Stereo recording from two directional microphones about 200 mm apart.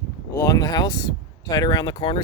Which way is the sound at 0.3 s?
15° left (ahead or behind).